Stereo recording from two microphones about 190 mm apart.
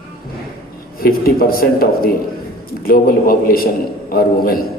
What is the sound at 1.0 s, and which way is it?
A man's voice, 50° left (ahead or behind).